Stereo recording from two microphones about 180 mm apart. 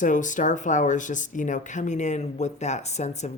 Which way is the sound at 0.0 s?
45° left (ahead or behind).